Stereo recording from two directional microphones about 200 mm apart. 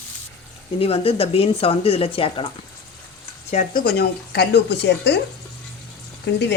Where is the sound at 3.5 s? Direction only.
35° left (ahead or behind).